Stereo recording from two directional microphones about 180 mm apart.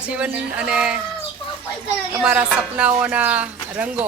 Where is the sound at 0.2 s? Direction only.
5° right (ahead or behind).